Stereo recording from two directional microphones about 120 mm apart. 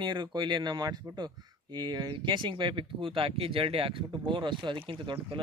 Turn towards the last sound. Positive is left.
turn(degrees=-45)  # may be behind; listen again after turning